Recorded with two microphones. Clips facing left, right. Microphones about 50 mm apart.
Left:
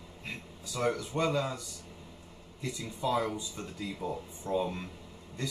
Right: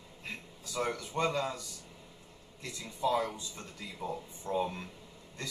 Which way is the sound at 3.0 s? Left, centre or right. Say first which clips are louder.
Even; centre.